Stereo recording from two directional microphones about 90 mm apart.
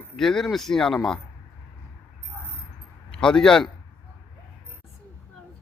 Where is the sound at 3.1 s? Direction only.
10° left (ahead or behind).